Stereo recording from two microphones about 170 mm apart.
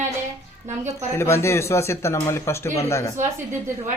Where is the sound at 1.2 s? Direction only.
15° left (ahead or behind).